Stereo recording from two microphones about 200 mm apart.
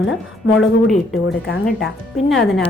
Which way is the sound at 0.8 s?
Centre (ahead or behind).